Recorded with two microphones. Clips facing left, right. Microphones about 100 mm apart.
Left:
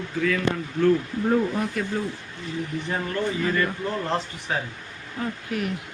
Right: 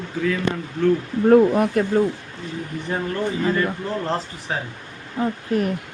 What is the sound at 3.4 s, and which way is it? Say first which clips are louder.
Speech: right 3 dB; 25° right (ahead or behind).